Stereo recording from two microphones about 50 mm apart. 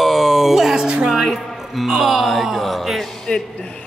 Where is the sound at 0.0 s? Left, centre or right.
Centre.